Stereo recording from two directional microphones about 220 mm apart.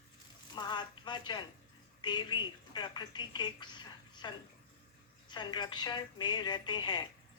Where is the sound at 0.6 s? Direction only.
20° left (ahead or behind).